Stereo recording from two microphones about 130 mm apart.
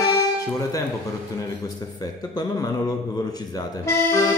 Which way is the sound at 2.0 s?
30° left (ahead or behind).